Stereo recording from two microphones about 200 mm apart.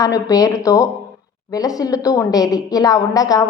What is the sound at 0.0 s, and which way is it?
A woman's voice, 20° left (ahead or behind).